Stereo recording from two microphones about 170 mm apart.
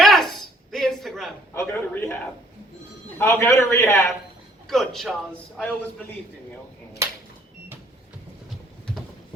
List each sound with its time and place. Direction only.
0.0 s a sound: centre (ahead or behind)
1.5 s a man's voice: 15° left (ahead or behind)
3.2 s a man's voice: 15° left (ahead or behind)
4.7 s a man's voice: centre (ahead or behind)